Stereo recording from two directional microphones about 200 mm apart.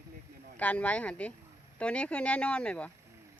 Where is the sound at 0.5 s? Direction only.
5° left (ahead or behind).